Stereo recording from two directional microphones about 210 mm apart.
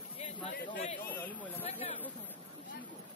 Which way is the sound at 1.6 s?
30° left (ahead or behind).